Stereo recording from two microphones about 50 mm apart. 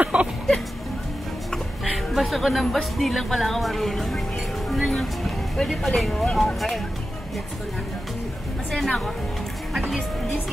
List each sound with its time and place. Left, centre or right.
0.0 s music: right
1.9 s speech: centre
8.7 s a woman's voice: centre